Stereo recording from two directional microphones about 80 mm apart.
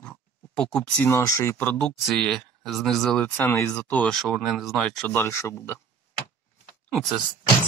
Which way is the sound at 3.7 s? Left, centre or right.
Centre.